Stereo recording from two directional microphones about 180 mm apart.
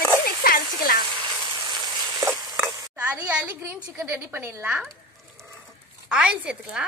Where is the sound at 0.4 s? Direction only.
50° left (ahead or behind).